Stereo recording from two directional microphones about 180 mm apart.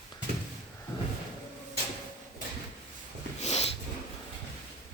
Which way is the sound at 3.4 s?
40° left (ahead or behind).